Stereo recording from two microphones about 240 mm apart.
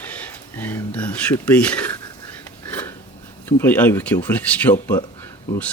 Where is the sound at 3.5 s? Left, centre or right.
Centre.